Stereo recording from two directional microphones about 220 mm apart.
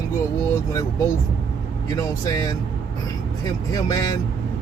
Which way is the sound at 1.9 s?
15° left (ahead or behind).